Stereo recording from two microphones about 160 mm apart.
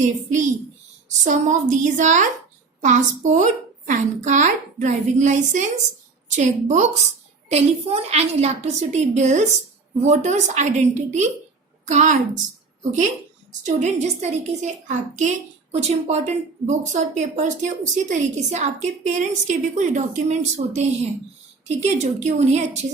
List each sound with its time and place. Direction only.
0.0 s a woman's voice: 50° right (ahead or behind)
13.5 s a woman's voice: 50° right (ahead or behind)